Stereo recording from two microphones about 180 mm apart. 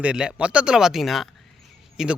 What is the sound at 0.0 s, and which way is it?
A man's voice, 5° right (ahead or behind).